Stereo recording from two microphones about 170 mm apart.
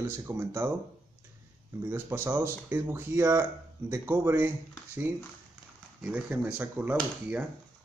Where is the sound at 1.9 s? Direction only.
15° right (ahead or behind).